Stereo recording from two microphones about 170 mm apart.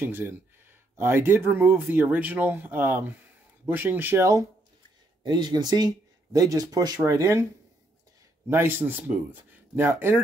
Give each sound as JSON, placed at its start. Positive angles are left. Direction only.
{"t": 0.0, "sound": "speech", "side_deg": -15}
{"t": 8.5, "sound": "speech", "side_deg": -15}